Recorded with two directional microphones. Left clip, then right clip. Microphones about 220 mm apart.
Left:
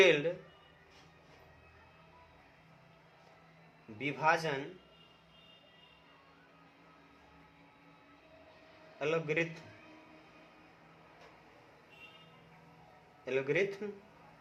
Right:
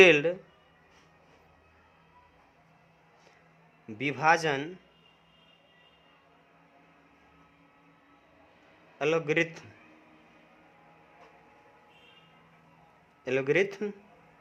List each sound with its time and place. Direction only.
0.0 s a man's voice: 50° right (ahead or behind)
3.9 s a man's voice: 50° right (ahead or behind)
9.0 s a man's voice: 50° right (ahead or behind)
13.2 s a man's voice: 50° right (ahead or behind)